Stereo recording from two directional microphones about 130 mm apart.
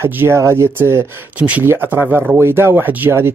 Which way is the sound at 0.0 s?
20° right (ahead or behind).